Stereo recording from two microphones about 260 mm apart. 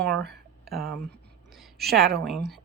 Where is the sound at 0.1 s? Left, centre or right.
Right.